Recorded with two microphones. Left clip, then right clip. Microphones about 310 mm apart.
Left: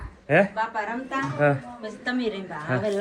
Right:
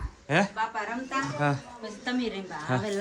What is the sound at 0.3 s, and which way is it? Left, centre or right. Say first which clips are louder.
Speech: left 5 dB; centre.